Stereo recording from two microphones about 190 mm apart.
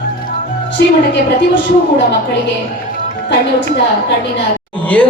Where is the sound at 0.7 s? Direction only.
70° left (ahead or behind).